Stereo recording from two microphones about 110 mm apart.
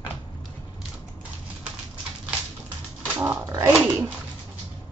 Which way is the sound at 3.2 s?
30° right (ahead or behind).